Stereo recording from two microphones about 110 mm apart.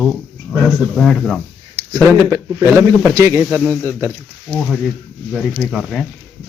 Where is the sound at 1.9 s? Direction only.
30° right (ahead or behind).